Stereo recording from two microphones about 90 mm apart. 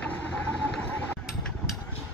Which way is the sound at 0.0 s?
15° left (ahead or behind).